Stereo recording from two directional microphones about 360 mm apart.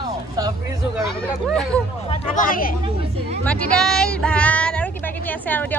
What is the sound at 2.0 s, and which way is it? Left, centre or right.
Speech, centre.